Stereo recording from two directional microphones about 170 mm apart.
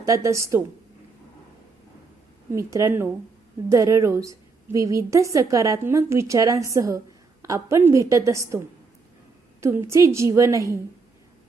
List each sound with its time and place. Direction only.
0.0 s a woman's voice: 20° right (ahead or behind)
2.5 s a woman's voice: 15° right (ahead or behind)